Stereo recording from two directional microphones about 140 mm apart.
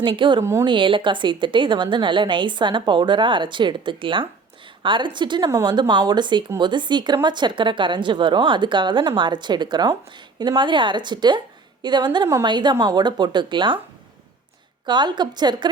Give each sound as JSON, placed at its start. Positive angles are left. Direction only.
{"t": 0.0, "sound": "a woman's voice", "side_deg": -35}
{"t": 5.5, "sound": "a woman's voice", "side_deg": -20}
{"t": 14.8, "sound": "a woman's voice", "side_deg": -30}